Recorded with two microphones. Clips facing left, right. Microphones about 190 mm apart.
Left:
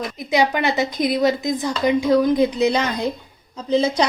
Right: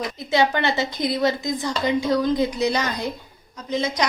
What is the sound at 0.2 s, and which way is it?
A woman's voice, 15° left (ahead or behind).